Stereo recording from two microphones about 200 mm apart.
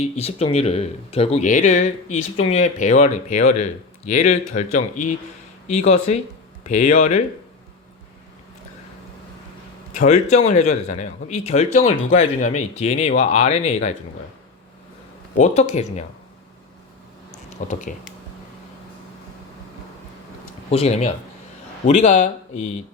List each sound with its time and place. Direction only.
0.0 s speech: 30° left (ahead or behind)
9.9 s speech: 35° left (ahead or behind)
15.4 s speech: 35° left (ahead or behind)
17.7 s speech: 35° left (ahead or behind)
20.7 s speech: 30° left (ahead or behind)